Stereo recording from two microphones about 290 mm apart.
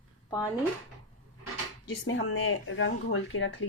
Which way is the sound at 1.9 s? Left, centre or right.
Left.